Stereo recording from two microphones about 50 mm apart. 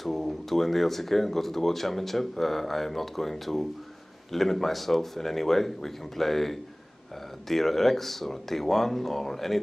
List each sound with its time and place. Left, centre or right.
0.0 s speech: centre